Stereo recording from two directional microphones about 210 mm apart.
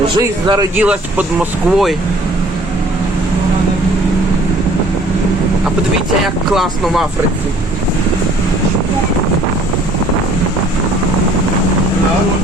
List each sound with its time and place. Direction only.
0.2 s speech: 20° right (ahead or behind)
0.8 s speech: 5° right (ahead or behind)
6.2 s speech: centre (ahead or behind)